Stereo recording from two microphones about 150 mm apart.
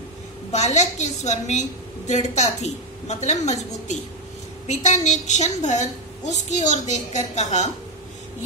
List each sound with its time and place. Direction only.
0.5 s a woman's voice: 50° left (ahead or behind)